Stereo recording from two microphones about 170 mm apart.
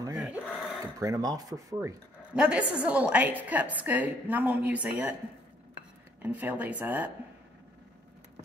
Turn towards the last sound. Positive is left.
turn(degrees=-10)  # may be behind; listen again after turning